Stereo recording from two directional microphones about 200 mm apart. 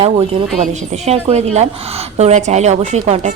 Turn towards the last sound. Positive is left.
turn(degrees=-35)  # may be behind; listen again after turning